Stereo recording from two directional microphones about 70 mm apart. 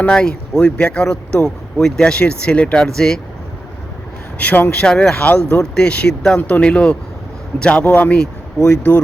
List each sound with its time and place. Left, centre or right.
0.1 s speech: centre
4.4 s speech: left
4.7 s speech: centre
8.2 s a sound: centre